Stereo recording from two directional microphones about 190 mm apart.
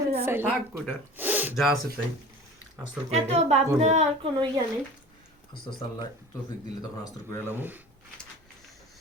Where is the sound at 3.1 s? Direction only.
35° right (ahead or behind).